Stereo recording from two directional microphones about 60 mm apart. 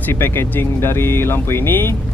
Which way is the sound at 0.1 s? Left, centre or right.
Left.